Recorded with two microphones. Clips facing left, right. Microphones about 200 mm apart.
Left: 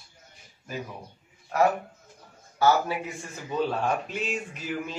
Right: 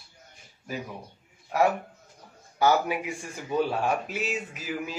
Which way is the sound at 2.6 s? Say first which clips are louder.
Even; 15° right (ahead or behind).